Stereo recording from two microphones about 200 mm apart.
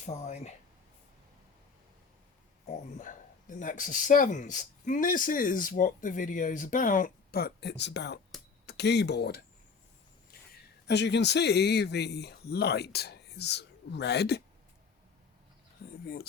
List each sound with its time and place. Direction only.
0.0 s speech: 35° left (ahead or behind)
2.6 s speech: 35° left (ahead or behind); by 9.4 s 55° left (ahead or behind)
10.8 s speech: 60° left (ahead or behind)
15.8 s a sound: 50° left (ahead or behind)